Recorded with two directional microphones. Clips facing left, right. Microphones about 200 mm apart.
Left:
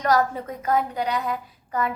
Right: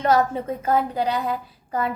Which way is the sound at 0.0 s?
25° right (ahead or behind).